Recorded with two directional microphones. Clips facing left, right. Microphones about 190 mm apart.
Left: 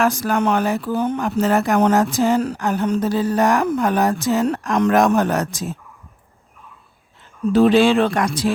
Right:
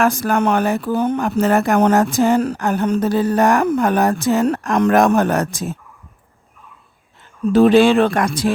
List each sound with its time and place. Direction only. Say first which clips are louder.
0.0 s speech: right 2 dB; 55° right (ahead or behind)
7.5 s speech: right 2 dB; 50° right (ahead or behind)